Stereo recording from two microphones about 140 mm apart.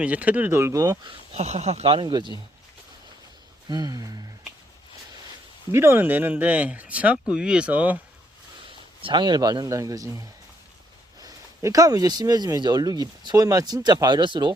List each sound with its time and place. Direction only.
0.0 s speech: 10° right (ahead or behind); by 1.1 s 25° right (ahead or behind)
1.3 s speech: 50° right (ahead or behind)
3.7 s speech: 30° right (ahead or behind)
5.7 s speech: 15° right (ahead or behind)
9.0 s speech: 35° right (ahead or behind)